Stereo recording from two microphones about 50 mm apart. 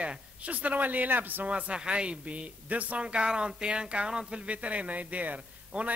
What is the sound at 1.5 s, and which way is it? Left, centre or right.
Speech, right.